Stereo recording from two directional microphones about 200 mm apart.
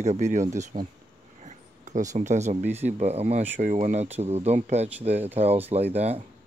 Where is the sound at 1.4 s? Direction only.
40° right (ahead or behind).